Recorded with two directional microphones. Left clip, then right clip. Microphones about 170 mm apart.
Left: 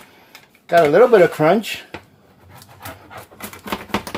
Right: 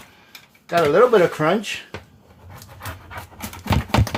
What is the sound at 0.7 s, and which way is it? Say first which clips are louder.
Speech: left 4 dB; 45° left (ahead or behind).